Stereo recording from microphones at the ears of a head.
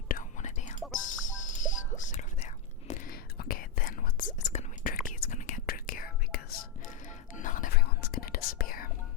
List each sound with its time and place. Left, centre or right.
0.1 s whispering: left